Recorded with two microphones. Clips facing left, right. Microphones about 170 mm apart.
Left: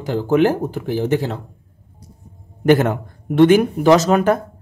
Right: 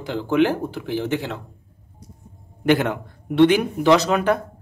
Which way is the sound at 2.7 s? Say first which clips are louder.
Left 4 dB; 45° left (ahead or behind).